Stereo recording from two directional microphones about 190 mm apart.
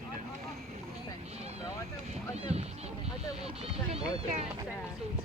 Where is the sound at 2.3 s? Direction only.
35° right (ahead or behind).